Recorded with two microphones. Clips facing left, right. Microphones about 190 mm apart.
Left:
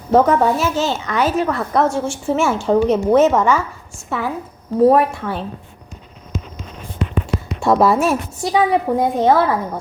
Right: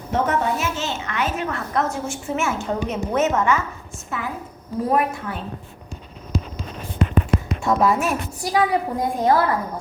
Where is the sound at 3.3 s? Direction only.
90° left.